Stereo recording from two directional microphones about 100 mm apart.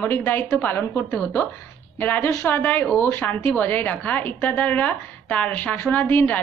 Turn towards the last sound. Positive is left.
turn(degrees=20)  # may be behind; listen again after turning